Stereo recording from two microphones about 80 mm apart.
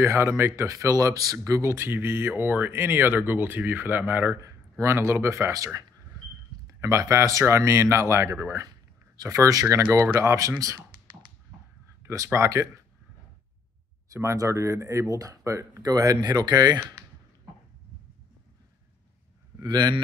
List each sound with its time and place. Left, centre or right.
0.0 s speech: right
4.4 s speech: right
10.0 s speech: right
12.0 s a sound: right
12.3 s speech: right
14.0 s speech: right
15.9 s speech: right
19.6 s speech: right